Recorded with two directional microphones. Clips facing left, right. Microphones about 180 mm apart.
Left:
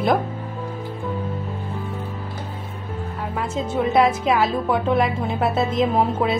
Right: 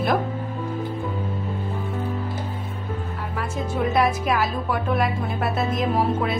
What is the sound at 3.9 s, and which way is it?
Music, 25° left (ahead or behind).